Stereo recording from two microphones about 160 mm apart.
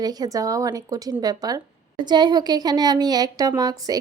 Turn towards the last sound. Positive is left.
turn(degrees=-20)  # may be behind; listen again after turning